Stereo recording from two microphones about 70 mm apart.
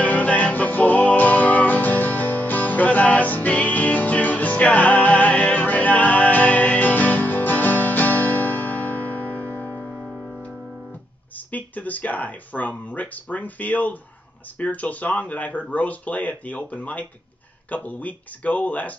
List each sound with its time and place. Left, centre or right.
0.0 s music: left
11.3 s speech: left